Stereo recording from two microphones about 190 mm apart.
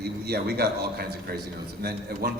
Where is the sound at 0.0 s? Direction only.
55° right (ahead or behind).